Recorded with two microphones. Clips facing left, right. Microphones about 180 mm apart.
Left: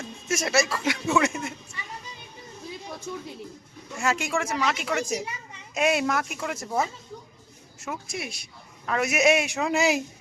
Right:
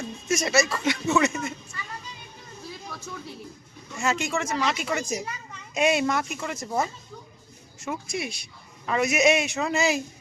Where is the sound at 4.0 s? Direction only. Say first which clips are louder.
Even; 10° left (ahead or behind).